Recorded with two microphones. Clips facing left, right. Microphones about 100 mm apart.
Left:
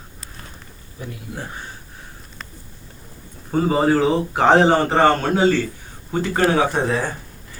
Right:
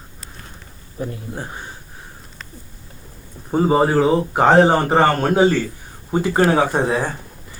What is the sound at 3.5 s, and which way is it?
Speech, 20° right (ahead or behind).